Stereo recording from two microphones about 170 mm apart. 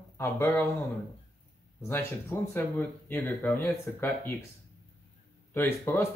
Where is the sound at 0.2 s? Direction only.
15° left (ahead or behind).